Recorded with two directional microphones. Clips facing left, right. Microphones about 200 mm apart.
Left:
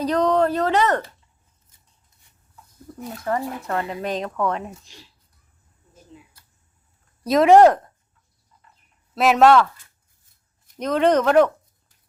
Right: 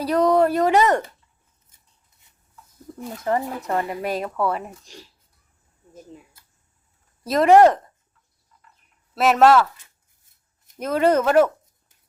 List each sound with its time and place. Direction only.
0.0 s speech: 10° right (ahead or behind)
3.2 s speech: 20° right (ahead or behind)
6.1 s speech: 45° right (ahead or behind)
7.3 s speech: centre (ahead or behind)
9.1 s speech: centre (ahead or behind)
10.8 s speech: 5° right (ahead or behind)